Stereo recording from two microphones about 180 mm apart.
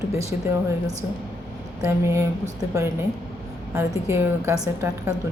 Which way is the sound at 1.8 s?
15° right (ahead or behind).